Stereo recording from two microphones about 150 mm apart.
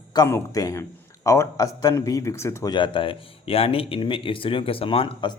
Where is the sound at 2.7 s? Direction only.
35° left (ahead or behind).